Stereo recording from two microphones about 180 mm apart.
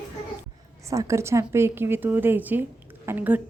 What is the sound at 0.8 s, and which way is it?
A woman's voice, 15° right (ahead or behind).